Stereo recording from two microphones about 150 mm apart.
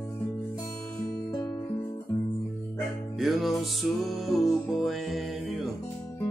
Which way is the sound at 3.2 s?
Centre (ahead or behind).